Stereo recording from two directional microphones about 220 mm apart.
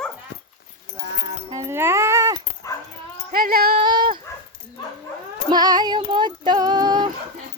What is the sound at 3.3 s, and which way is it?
Female singing, 40° right (ahead or behind).